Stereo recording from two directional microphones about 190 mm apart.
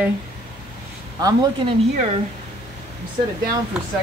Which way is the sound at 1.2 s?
20° right (ahead or behind).